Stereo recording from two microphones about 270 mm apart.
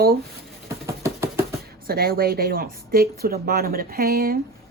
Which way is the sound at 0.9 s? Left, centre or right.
Centre.